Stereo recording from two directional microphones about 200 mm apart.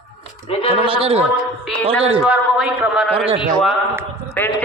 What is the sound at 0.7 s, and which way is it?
A man's voice, 25° right (ahead or behind).